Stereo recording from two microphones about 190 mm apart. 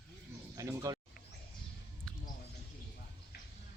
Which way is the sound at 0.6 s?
15° right (ahead or behind).